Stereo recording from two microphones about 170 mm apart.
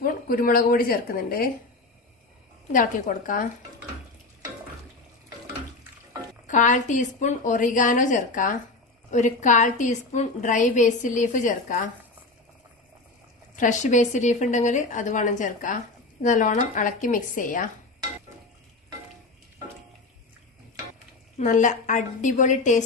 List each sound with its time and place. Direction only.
0.0 s a woman's voice: 55° left (ahead or behind)
2.7 s a woman's voice: 55° left (ahead or behind)
6.5 s a woman's voice: 45° left (ahead or behind)
13.6 s a woman's voice: 45° left (ahead or behind)
21.3 s a woman's voice: 45° left (ahead or behind)